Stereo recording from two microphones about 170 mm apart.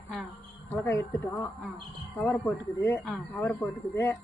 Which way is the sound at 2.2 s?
15° left (ahead or behind).